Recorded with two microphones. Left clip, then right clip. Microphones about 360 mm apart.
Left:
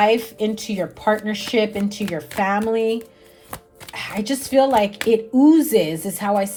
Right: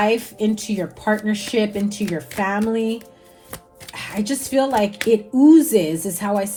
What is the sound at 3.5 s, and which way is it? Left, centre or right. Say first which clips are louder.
Music: left 2 dB; centre.